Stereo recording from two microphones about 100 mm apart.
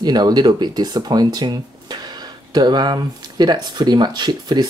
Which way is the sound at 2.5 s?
45° right (ahead or behind).